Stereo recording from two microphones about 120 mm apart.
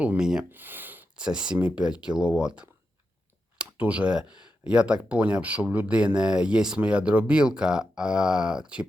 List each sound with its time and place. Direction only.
0.0 s speech: 10° right (ahead or behind)
0.5 s speech: 15° right (ahead or behind)